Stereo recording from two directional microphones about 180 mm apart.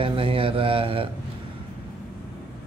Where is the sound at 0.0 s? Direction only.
30° right (ahead or behind).